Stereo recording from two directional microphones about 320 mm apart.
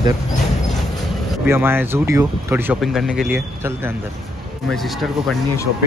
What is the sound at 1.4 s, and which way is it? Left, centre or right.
Speech, centre.